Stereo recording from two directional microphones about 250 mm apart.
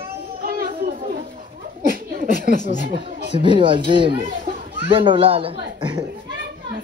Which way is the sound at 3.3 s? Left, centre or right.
Centre.